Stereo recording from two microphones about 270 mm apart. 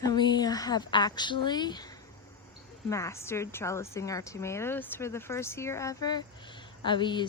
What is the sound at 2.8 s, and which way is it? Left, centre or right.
Speech, centre.